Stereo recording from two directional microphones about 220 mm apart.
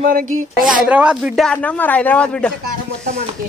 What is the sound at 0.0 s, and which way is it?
Speech, 40° right (ahead or behind).